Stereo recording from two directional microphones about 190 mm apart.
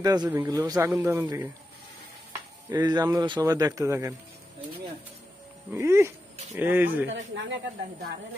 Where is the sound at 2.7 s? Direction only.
20° right (ahead or behind).